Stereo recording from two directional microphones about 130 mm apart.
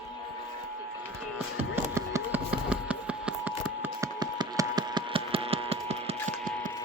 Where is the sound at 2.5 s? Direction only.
10° right (ahead or behind).